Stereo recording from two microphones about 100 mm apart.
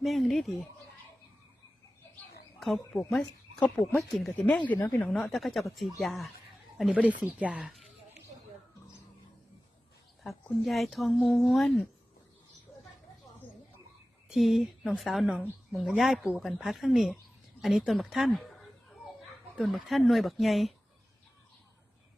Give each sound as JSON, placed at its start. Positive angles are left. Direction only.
{"t": 0.0, "sound": "speech", "side_deg": 0}
{"t": 2.6, "sound": "speech", "side_deg": 0}
{"t": 5.1, "sound": "speech", "side_deg": 5}
{"t": 6.0, "sound": "chuckle", "side_deg": 0}
{"t": 6.9, "sound": "speech", "side_deg": -15}
{"t": 10.2, "sound": "speech", "side_deg": 0}
{"t": 14.3, "sound": "speech", "side_deg": 0}